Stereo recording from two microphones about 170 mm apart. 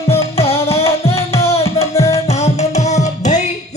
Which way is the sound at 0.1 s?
35° left (ahead or behind).